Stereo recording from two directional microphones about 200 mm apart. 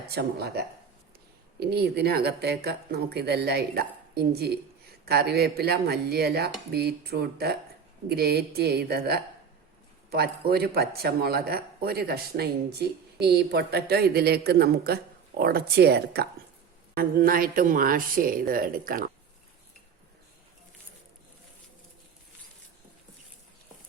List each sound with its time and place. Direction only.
0.1 s speech: 55° right (ahead or behind)